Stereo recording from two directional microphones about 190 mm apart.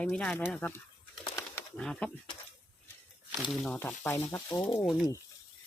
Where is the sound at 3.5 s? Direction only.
Centre (ahead or behind).